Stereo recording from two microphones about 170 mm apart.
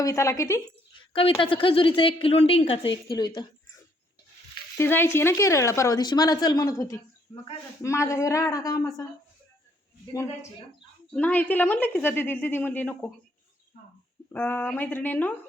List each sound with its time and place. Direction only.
0.0 s a woman's voice: 20° left (ahead or behind)
1.1 s a woman's voice: 35° left (ahead or behind)
4.8 s a woman's voice: 15° left (ahead or behind)
11.1 s a woman's voice: 10° left (ahead or behind)
14.3 s a woman's voice: 10° left (ahead or behind)